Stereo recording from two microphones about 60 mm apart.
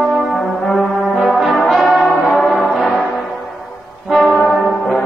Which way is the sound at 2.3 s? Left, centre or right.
Left.